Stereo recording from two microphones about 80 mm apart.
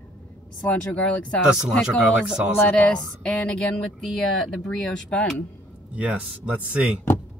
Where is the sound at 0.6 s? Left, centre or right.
Centre.